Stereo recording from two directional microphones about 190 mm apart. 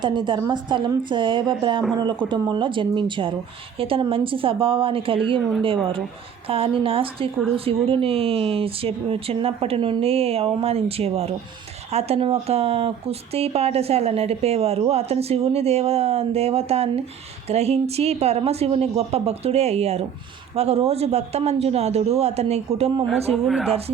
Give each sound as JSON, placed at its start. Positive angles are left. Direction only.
{"t": 0.0, "sound": "speech", "side_deg": -25}
{"t": 5.4, "sound": "speech", "side_deg": 0}
{"t": 6.5, "sound": "speech", "side_deg": -30}
{"t": 23.3, "sound": "speech", "side_deg": 0}